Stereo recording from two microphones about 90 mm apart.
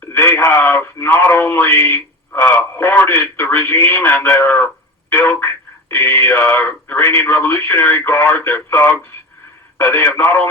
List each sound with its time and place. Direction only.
0.1 s speech: 25° left (ahead or behind)